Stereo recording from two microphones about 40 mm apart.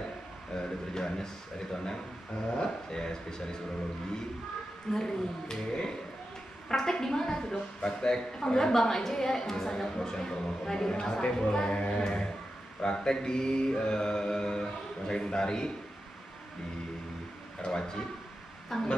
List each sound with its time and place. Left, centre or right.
0.6 s a woman's voice: centre
4.9 s a woman's voice: centre
11.7 s music: left
12.0 s a woman's voice: centre
17.6 s a woman's voice: centre
18.7 s a sound: centre